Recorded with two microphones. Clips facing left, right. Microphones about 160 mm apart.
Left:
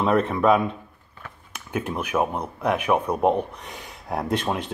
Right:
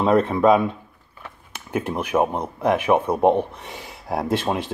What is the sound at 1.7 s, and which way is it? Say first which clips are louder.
Speech: right 3 dB; 10° right (ahead or behind).